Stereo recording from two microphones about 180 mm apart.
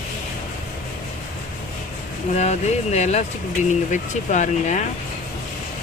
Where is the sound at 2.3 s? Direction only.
40° left (ahead or behind).